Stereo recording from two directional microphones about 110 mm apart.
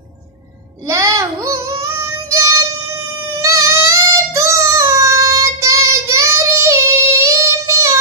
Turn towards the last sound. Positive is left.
turn(degrees=-25)  # may be behind; listen again after turning